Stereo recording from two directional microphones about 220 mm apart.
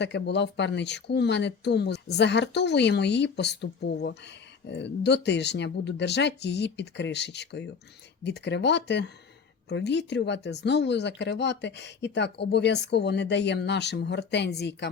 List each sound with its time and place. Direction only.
0.0 s speech: 50° left (ahead or behind)